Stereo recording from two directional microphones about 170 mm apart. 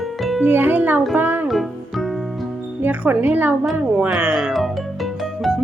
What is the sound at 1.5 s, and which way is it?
Music, centre (ahead or behind).